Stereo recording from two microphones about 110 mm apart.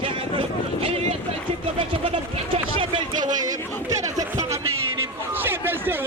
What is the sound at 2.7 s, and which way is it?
Chatter, 50° right (ahead or behind).